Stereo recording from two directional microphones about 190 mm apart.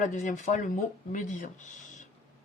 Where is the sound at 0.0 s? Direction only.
40° left (ahead or behind).